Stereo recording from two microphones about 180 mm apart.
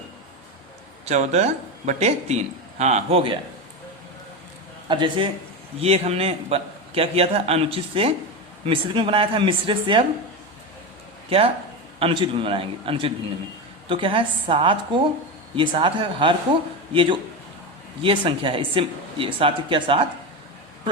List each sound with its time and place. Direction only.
1.0 s a man's voice: 40° right (ahead or behind)
4.9 s a man's voice: 25° right (ahead or behind)
11.3 s a man's voice: 30° right (ahead or behind)